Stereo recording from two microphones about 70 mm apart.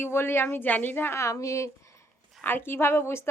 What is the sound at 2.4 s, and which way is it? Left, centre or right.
Speech, left.